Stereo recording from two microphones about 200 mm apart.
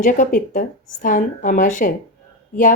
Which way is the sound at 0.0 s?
40° left (ahead or behind).